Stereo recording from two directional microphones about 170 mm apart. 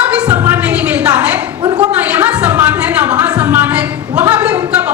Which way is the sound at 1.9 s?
10° right (ahead or behind).